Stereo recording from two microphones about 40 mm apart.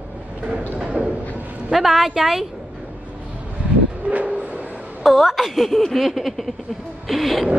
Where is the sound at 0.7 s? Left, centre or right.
Right.